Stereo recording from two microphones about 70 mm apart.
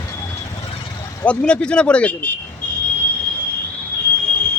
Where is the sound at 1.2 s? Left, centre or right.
Centre.